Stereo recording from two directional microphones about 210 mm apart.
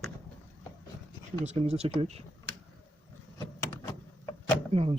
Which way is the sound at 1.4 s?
30° right (ahead or behind).